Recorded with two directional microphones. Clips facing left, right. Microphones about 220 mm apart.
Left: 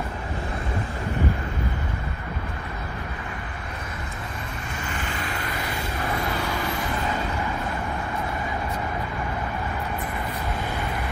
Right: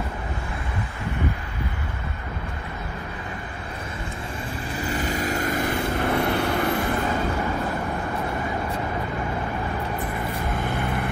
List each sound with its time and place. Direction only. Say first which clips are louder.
4.8 s vehicle: right 7 dB; 40° right (ahead or behind); by 6.7 s 60° right (ahead or behind)